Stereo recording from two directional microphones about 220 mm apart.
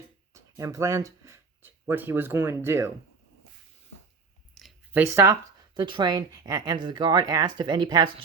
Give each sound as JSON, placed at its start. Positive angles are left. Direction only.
{"t": 0.3, "sound": "speech", "side_deg": -15}
{"t": 4.5, "sound": "speech", "side_deg": -5}